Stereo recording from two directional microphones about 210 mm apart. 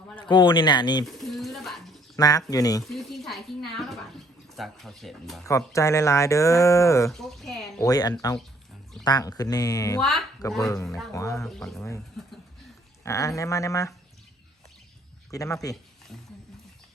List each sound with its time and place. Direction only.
0.3 s speech: 20° left (ahead or behind)
1.0 s pigeon: centre (ahead or behind)
2.1 s speech: 15° left (ahead or behind)
2.9 s a woman's voice: centre (ahead or behind)
5.5 s speech: 15° left (ahead or behind)
7.1 s speech: centre (ahead or behind)
7.8 s speech: 15° left (ahead or behind)
10.0 s speech: centre (ahead or behind)
10.6 s speech: 15° left (ahead or behind)
10.8 s speech: centre (ahead or behind)
11.1 s speech: 15° left (ahead or behind)
11.4 s speech: centre (ahead or behind)
13.1 s speech: 15° left (ahead or behind)
15.3 s speech: 15° left (ahead or behind)